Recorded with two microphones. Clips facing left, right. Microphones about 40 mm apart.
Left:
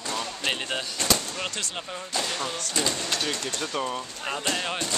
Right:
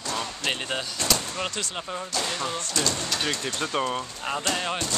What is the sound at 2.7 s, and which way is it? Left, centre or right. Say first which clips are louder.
Speech: left 1 dB; centre.